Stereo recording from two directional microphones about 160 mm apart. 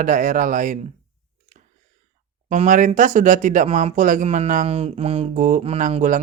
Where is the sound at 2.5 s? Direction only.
50° right (ahead or behind).